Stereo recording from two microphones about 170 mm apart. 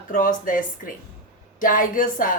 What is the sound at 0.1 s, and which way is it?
Speech, 50° left (ahead or behind).